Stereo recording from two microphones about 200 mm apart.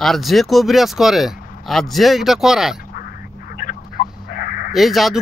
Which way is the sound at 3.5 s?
45° left (ahead or behind).